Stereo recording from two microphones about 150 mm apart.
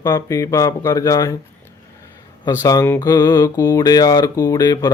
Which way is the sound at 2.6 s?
25° left (ahead or behind).